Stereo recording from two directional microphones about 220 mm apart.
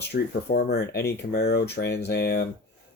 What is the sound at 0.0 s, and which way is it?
Speech, 45° left (ahead or behind).